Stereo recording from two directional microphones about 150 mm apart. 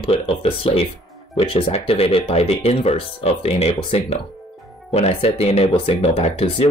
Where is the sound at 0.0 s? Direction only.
40° left (ahead or behind).